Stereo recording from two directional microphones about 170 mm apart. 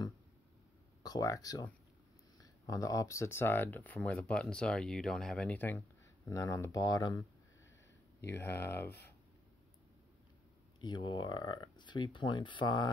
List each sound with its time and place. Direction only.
1.0 s speech: 20° left (ahead or behind)
8.4 s speech: 15° left (ahead or behind)
10.8 s speech: 25° left (ahead or behind)